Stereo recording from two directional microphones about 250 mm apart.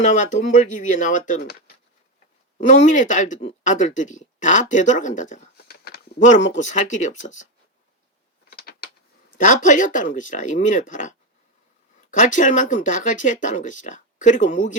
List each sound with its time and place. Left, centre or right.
0.0 s speech: left
8.4 s mechanisms: left
9.4 s speech: left